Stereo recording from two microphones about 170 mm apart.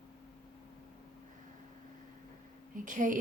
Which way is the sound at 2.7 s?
50° right (ahead or behind).